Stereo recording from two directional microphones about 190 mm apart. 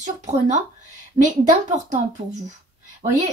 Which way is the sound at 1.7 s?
40° right (ahead or behind).